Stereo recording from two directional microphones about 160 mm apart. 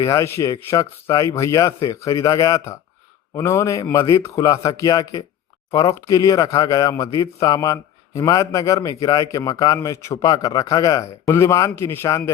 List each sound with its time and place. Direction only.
0.0 s a man's voice: 20° left (ahead or behind)